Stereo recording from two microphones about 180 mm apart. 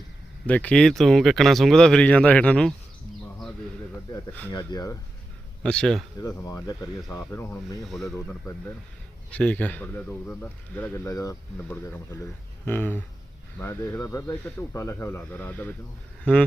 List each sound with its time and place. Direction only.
0.4 s speech: 5° left (ahead or behind)
4.5 s speech: 20° left (ahead or behind)
5.6 s speech: 5° left (ahead or behind)
6.4 s speech: 20° left (ahead or behind)
7.8 s speech: centre (ahead or behind)
9.3 s speech: 10° left (ahead or behind)